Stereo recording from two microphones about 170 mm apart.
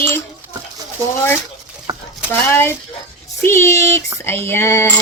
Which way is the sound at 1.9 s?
25° right (ahead or behind).